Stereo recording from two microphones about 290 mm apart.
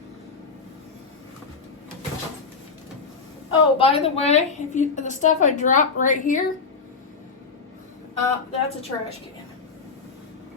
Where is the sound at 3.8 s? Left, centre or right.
Centre.